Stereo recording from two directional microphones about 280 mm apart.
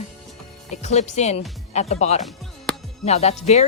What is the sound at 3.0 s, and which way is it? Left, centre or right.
Speech, left.